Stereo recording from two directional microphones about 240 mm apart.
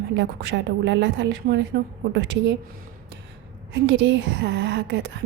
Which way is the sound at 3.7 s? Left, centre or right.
Right.